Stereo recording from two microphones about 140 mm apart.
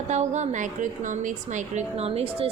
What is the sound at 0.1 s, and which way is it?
A woman's voice, 60° right (ahead or behind).